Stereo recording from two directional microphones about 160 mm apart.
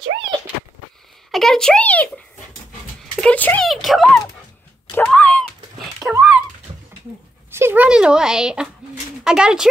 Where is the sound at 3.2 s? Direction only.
10° left (ahead or behind).